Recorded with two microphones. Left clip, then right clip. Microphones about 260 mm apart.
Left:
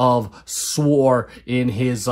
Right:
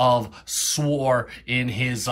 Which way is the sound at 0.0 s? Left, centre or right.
Left.